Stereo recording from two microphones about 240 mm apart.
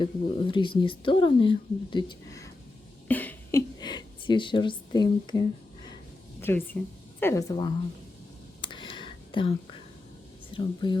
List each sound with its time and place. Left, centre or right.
0.0 s a woman's voice: left
8.6 s a sound: centre
10.5 s speech: centre